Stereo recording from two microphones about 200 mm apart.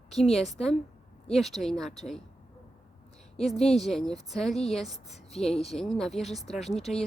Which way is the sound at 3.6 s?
Centre (ahead or behind).